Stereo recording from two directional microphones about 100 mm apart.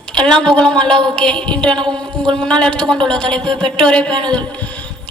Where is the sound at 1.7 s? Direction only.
50° right (ahead or behind).